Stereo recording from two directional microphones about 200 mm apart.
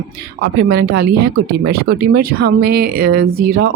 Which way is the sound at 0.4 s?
55° right (ahead or behind).